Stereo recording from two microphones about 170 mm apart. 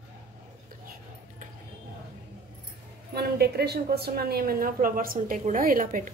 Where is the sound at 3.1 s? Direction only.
70° right (ahead or behind).